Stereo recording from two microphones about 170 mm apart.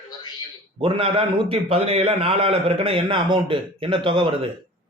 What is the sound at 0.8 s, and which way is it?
A man's voice, 30° right (ahead or behind).